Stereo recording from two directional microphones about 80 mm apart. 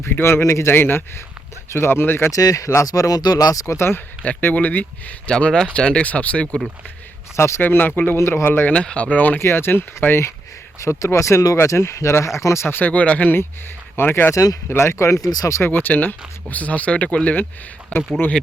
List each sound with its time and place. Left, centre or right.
0.0 s speech: left
2.3 s speech: left
3.8 s speech: left
5.3 s speech: centre
7.3 s speech: left
8.7 s speech: centre
14.3 s speech: left
14.7 s speech: left
15.7 s speech: left